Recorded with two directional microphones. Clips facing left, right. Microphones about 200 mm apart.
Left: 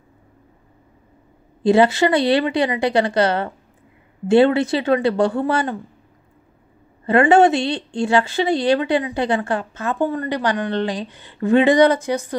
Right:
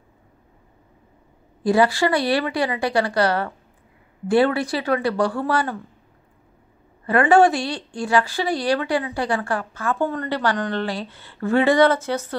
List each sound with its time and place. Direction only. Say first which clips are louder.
1.6 s speech: left 3 dB; 25° left (ahead or behind)
7.1 s a woman's voice: left 2 dB; 25° left (ahead or behind)